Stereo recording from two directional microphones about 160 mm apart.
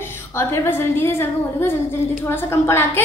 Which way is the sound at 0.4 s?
15° left (ahead or behind).